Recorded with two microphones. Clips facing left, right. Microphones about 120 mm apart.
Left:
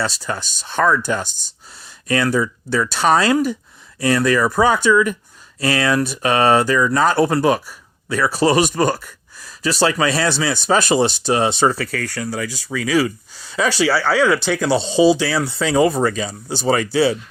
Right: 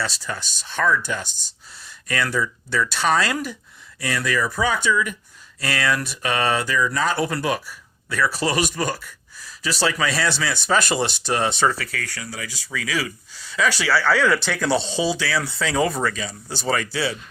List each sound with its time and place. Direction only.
0.0 s speech: 40° left (ahead or behind)
2.0 s speech: 25° left (ahead or behind); by 5.1 s 50° left (ahead or behind)
5.5 s speech: 25° left (ahead or behind)
8.5 s speech: 45° left (ahead or behind)
9.8 s speech: 25° left (ahead or behind)
11.8 s speech: 45° left (ahead or behind)
12.7 s speech: 35° left (ahead or behind)